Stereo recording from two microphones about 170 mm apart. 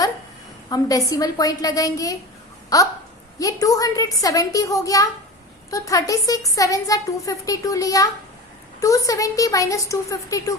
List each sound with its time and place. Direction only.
0.7 s speech: 20° left (ahead or behind)